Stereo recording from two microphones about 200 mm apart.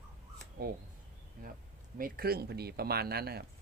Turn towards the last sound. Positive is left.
turn(degrees=-50)  # may be behind; listen again after turning